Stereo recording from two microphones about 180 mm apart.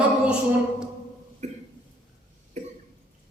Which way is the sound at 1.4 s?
40° right (ahead or behind).